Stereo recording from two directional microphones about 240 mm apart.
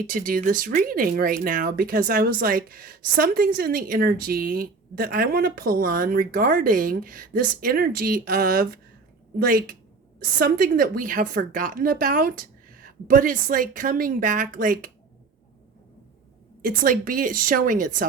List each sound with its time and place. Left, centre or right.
0.1 s speech: right
16.6 s speech: right